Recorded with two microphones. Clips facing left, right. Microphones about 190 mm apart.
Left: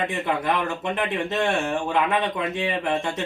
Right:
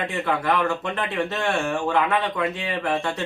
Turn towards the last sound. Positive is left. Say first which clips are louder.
# left 1 dB
turn(degrees=20)  # may be behind; listen again after turning